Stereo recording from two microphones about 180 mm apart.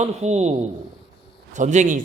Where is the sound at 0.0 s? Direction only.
40° right (ahead or behind).